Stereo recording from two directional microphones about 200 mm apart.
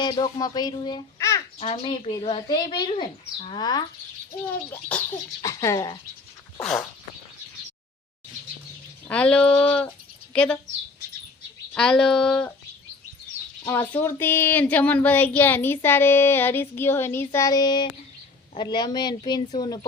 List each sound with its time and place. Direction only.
0.0 s a child's voice: 20° left (ahead or behind)
1.5 s speech: 30° left (ahead or behind)
4.7 s speech: 5° left (ahead or behind)
6.6 s speech: centre (ahead or behind)
9.0 s speech: 5° left (ahead or behind)
11.7 s speech: 5° left (ahead or behind)
13.7 s speech: 10° left (ahead or behind)